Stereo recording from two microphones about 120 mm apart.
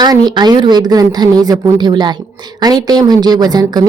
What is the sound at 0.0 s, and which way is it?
A woman's voice, 35° right (ahead or behind).